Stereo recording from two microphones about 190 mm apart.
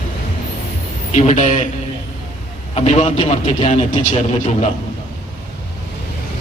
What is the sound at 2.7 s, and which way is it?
Speech, 35° left (ahead or behind).